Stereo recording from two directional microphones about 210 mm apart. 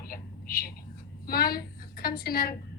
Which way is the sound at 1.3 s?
45° left (ahead or behind).